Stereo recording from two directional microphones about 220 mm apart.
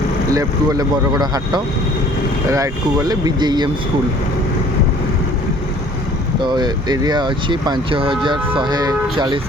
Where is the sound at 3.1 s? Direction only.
20° right (ahead or behind).